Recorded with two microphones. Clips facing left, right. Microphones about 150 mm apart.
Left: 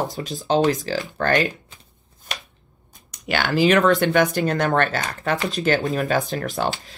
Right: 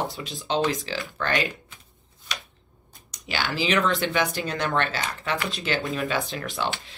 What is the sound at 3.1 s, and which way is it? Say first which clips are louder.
Speech: left 7 dB; 55° left (ahead or behind).